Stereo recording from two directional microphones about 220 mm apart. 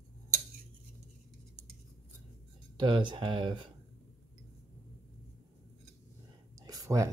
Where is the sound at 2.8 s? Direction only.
20° right (ahead or behind).